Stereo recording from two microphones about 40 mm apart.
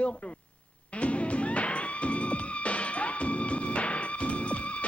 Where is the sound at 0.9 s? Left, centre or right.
Left.